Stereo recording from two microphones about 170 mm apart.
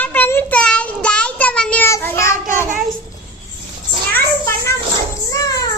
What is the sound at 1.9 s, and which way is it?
Child singing, 15° left (ahead or behind).